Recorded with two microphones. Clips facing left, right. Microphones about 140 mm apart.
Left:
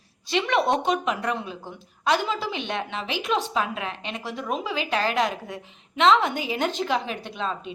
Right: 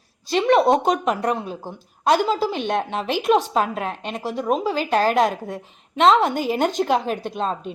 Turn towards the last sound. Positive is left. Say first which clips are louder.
# right 5 dB
turn(degrees=-45)  # may be behind; listen again after turning